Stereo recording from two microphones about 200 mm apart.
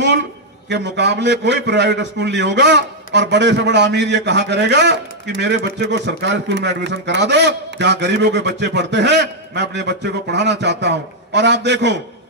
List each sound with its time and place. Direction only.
0.7 s a man's voice: 60° right (ahead or behind)